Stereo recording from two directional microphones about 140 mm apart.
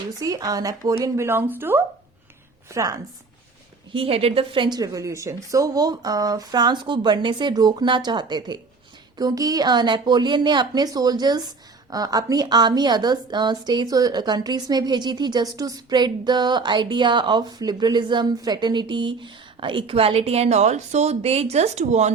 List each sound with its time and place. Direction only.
0.2 s a woman's voice: 25° right (ahead or behind)
3.9 s a woman's voice: 45° right (ahead or behind)